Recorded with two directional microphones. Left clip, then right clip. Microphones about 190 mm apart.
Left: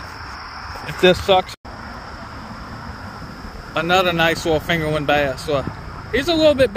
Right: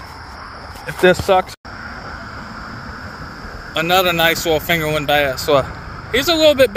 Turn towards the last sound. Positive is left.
turn(degrees=-10)  # may be behind; listen again after turning